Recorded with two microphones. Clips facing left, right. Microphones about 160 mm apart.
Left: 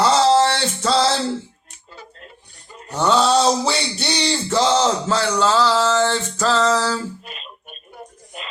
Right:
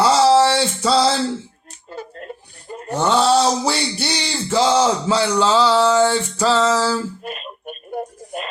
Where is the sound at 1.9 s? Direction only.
55° right (ahead or behind).